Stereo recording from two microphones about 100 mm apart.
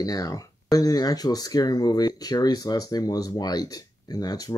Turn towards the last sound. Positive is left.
turn(degrees=40)  # may be behind; listen again after turning